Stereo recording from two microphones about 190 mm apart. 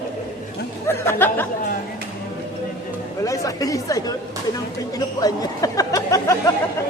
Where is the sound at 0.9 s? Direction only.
10° left (ahead or behind).